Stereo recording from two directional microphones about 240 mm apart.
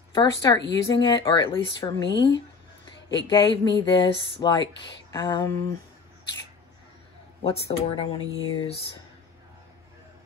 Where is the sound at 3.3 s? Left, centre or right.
Centre.